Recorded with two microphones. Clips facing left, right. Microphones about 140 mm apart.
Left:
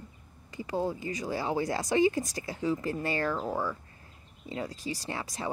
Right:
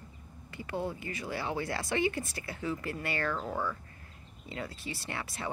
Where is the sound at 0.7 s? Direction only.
35° left (ahead or behind).